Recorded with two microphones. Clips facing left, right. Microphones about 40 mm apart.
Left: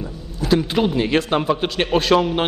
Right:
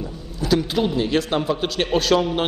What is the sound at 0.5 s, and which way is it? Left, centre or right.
A man's voice, left.